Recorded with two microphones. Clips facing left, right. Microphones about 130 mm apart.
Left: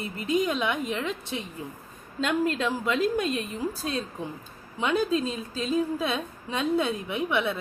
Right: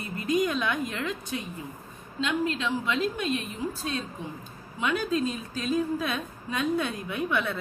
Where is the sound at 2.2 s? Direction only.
45° left (ahead or behind).